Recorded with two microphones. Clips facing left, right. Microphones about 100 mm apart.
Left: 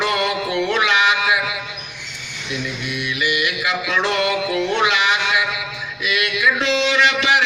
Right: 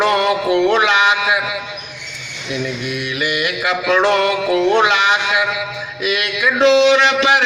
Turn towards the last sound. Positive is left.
turn(degrees=-35)  # may be behind; listen again after turning